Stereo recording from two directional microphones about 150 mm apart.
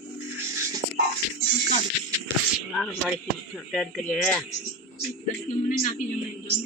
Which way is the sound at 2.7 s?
5° left (ahead or behind).